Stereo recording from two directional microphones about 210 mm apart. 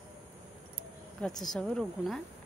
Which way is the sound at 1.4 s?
Centre (ahead or behind).